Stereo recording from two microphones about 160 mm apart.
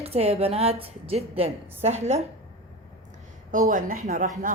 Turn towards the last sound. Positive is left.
turn(degrees=-60)  # may be behind; listen again after turning